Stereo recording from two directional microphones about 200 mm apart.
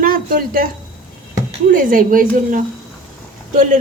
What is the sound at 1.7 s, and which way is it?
Speech, 40° right (ahead or behind).